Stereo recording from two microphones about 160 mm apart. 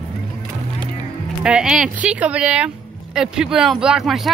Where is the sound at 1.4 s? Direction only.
5° right (ahead or behind).